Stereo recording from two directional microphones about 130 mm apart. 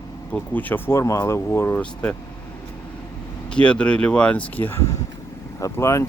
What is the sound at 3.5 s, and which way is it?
Speech, 10° left (ahead or behind).